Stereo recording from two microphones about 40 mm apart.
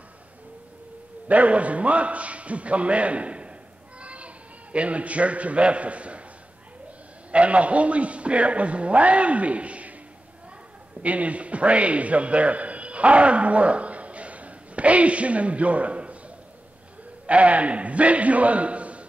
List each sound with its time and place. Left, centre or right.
1.3 s a man's voice: right
4.0 s children playing: right
4.7 s a man's voice: right
7.2 s a man's voice: right
11.0 s a man's voice: right
17.3 s a man's voice: right